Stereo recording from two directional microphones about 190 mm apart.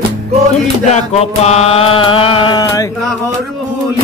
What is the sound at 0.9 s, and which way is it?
Mantra, 35° left (ahead or behind).